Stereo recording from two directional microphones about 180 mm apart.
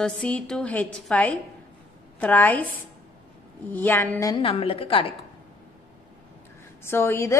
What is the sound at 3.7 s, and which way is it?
A woman's voice, 10° left (ahead or behind).